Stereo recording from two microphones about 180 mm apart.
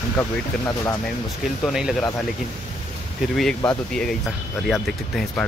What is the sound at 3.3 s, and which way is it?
Speech, 5° left (ahead or behind).